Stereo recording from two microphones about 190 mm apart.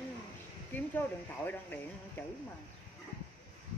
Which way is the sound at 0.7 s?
10° left (ahead or behind).